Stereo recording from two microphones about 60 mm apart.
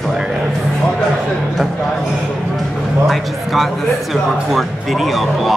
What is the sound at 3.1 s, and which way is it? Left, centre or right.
Speech, centre.